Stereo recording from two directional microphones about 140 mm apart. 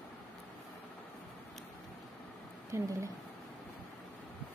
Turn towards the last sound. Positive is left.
turn(degrees=-20)  # may be behind; listen again after turning